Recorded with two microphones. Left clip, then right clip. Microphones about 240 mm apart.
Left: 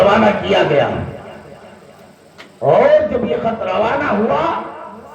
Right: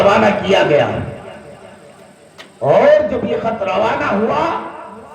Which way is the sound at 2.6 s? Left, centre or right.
Right.